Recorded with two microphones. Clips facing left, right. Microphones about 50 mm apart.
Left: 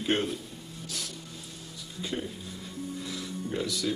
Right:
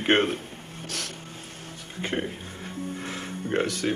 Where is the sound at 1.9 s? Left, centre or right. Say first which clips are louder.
Right 5 dB; right.